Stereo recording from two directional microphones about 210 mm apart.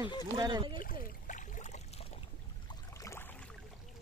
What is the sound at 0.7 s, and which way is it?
Boat, 40° left (ahead or behind).